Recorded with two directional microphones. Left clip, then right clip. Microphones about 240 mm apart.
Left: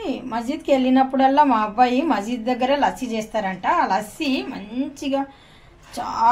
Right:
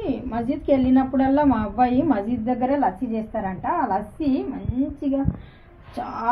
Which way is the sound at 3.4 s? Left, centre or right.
Left.